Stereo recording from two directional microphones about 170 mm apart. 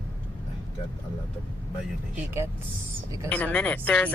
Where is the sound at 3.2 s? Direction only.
10° left (ahead or behind).